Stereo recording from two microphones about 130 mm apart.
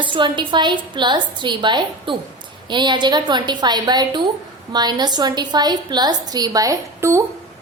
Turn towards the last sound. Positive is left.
turn(degrees=-25)  # may be behind; listen again after turning